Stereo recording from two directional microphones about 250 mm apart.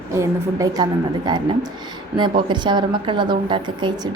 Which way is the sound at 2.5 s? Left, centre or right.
Centre.